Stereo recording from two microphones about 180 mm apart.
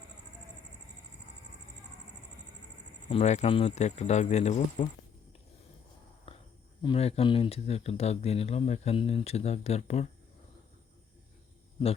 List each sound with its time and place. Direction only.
3.1 s speech: 35° left (ahead or behind)
6.3 s a sound: 30° left (ahead or behind)
6.8 s speech: 35° left (ahead or behind)